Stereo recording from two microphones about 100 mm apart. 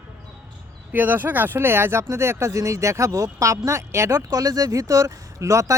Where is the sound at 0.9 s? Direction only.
15° right (ahead or behind).